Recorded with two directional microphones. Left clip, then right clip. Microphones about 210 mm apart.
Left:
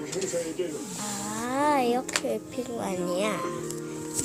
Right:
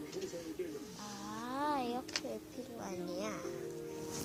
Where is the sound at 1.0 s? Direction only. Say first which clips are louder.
Left 12 dB; 10° left (ahead or behind).